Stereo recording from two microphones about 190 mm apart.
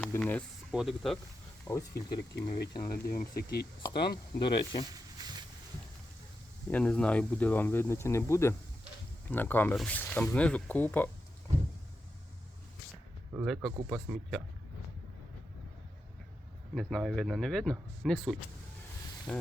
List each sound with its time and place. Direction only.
0.0 s speech: 5° left (ahead or behind)
0.7 s speech: centre (ahead or behind)
1.6 s speech: 15° left (ahead or behind)
2.8 s speech: 50° left (ahead or behind)
4.4 s speech: 25° left (ahead or behind)
6.7 s speech: 5° left (ahead or behind)
13.4 s speech: centre (ahead or behind)
16.7 s speech: 5° left (ahead or behind)